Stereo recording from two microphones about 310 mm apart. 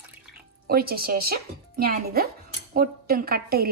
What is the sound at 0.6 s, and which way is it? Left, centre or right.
A woman's voice, right.